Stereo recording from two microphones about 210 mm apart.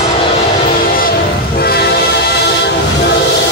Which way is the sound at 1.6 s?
45° left (ahead or behind).